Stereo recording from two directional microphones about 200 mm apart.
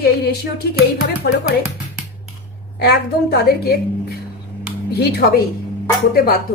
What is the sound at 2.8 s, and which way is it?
Speech, 50° left (ahead or behind).